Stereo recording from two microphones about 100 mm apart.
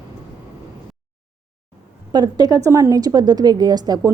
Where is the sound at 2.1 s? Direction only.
45° right (ahead or behind).